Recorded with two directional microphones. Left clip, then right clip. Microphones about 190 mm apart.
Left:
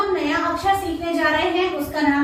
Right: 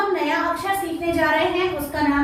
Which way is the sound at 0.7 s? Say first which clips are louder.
Left 9 dB; 25° right (ahead or behind).